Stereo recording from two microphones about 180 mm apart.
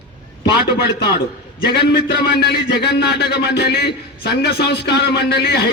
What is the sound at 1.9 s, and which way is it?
A man's voice, 65° left (ahead or behind).